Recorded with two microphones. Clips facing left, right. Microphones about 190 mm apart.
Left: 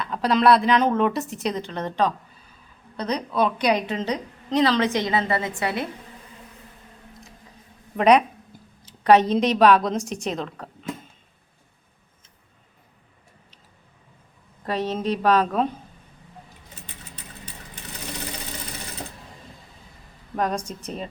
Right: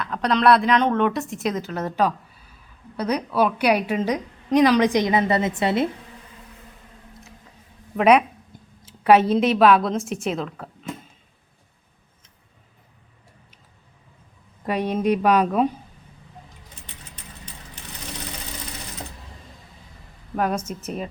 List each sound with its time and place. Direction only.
0.0 s a woman's voice: centre (ahead or behind); by 5.9 s 25° right (ahead or behind)
7.9 s a woman's voice: 5° right (ahead or behind)
14.6 s a woman's voice: 10° right (ahead or behind)
20.3 s a woman's voice: 5° right (ahead or behind)